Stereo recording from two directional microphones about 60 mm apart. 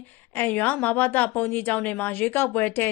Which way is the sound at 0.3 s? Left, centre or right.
Left.